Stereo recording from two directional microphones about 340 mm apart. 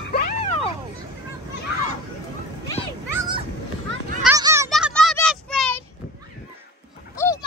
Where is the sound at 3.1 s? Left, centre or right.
Centre.